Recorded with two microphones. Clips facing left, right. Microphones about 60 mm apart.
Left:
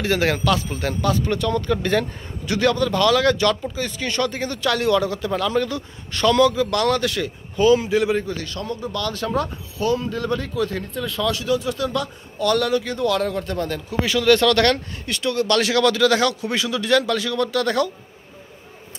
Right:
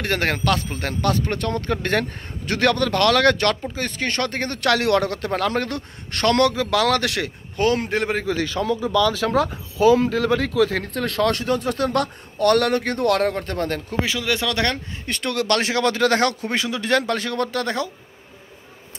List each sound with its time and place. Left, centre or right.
0.0 s speech: right
1.2 s speech: right
2.6 s speech: right
3.7 s speech: right
8.8 s speech: right
14.0 s speech: centre
15.2 s speech: right
15.6 s a man's voice: right